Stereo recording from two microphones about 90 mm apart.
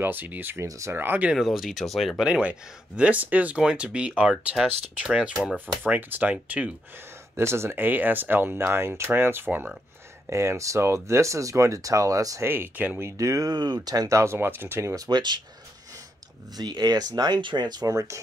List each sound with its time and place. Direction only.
0.0 s speech: 20° right (ahead or behind)
0.7 s speech: 35° right (ahead or behind)
1.3 s speech: 5° right (ahead or behind)
7.3 s speech: 30° right (ahead or behind)
12.4 s speech: 20° right (ahead or behind)
13.2 s speech: 40° right (ahead or behind)
15.0 s speech: 50° right (ahead or behind)
16.5 s speech: 45° right (ahead or behind)
17.9 s speech: 35° right (ahead or behind)